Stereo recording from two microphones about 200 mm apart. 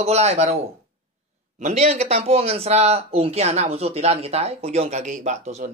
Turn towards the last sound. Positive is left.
turn(degrees=-35)  # may be behind; listen again after turning